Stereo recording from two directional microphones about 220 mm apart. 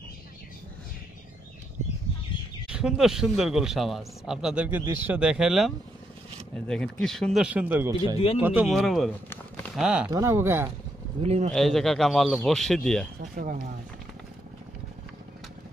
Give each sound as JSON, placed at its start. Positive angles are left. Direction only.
{"t": 2.7, "sound": "a man's voice", "side_deg": 0}
{"t": 6.7, "sound": "a man's voice", "side_deg": 5}
{"t": 11.2, "sound": "speech", "side_deg": -30}
{"t": 11.5, "sound": "a man's voice", "side_deg": 0}
{"t": 13.2, "sound": "a sound", "side_deg": -35}